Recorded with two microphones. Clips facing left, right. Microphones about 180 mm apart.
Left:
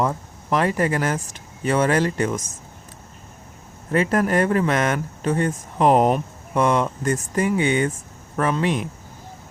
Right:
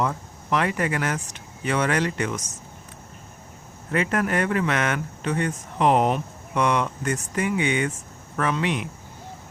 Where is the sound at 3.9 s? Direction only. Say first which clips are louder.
Left 4 dB; 35° left (ahead or behind).